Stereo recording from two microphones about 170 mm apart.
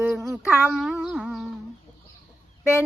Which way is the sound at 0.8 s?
Centre (ahead or behind).